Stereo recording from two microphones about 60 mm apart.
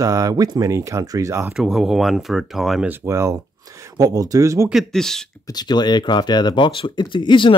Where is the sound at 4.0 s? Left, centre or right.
Right.